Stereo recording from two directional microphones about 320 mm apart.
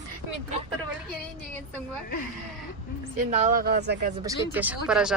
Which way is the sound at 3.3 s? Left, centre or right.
Right.